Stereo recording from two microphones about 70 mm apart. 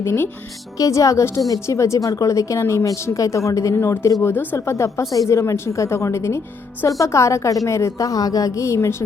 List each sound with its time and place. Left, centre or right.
0.8 s a woman's voice: left